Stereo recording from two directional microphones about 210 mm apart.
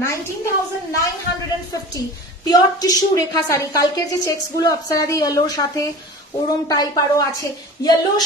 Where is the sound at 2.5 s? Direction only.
20° left (ahead or behind).